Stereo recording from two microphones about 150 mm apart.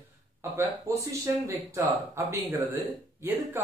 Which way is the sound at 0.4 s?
15° right (ahead or behind).